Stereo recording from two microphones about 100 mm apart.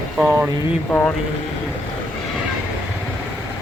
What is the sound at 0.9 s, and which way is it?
Speech, 15° left (ahead or behind).